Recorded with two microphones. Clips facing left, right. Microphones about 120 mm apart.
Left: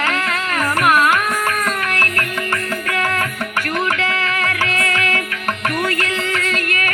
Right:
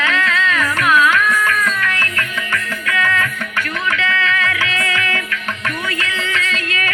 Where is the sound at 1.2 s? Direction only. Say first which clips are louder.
Right 3 dB; 60° left (ahead or behind).